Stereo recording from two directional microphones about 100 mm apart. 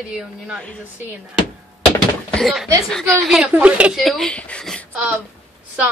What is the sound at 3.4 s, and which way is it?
Speech, 10° right (ahead or behind).